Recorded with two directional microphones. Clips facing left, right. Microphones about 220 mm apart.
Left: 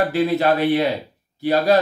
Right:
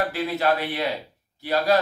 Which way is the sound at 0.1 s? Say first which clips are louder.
Left 6 dB; 20° left (ahead or behind).